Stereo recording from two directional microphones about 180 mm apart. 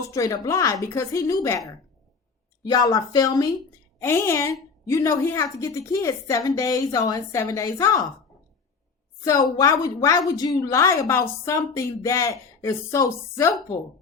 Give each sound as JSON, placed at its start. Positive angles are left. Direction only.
{"t": 0.1, "sound": "a woman's voice", "side_deg": 20}
{"t": 9.2, "sound": "a woman's voice", "side_deg": 20}